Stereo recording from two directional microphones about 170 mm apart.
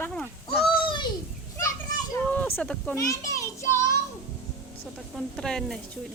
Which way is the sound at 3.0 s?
20° left (ahead or behind).